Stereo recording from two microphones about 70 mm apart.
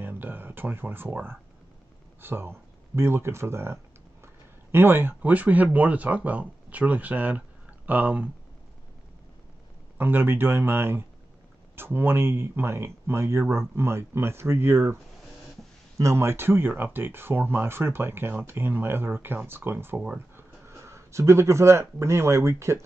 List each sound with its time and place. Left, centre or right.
0.0 s a sound: right
2.2 s speech: right
9.9 s speech: right
16.0 s speech: right